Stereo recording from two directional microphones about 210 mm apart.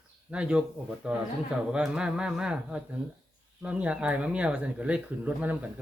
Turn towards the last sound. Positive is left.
turn(degrees=-5)  # may be behind; listen again after turning